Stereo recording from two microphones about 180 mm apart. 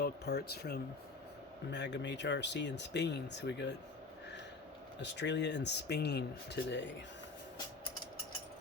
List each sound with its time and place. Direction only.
0.0 s speech: 65° left (ahead or behind)
1.7 s speech: 75° left (ahead or behind)
4.9 s speech: 75° left (ahead or behind)